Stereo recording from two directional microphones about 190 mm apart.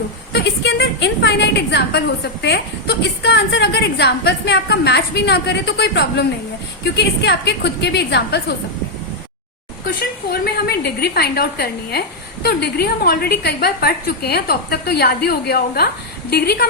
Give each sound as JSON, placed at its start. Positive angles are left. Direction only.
{"t": 0.3, "sound": "a sound", "side_deg": 65}
{"t": 2.4, "sound": "a woman's voice", "side_deg": 65}
{"t": 9.8, "sound": "a woman's voice", "side_deg": 55}